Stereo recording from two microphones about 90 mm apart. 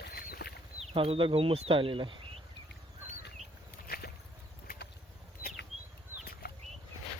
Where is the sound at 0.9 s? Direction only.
85° right; by 2.1 s 70° right (ahead or behind).